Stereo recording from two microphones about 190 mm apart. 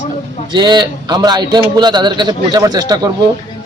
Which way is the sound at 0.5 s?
25° right (ahead or behind).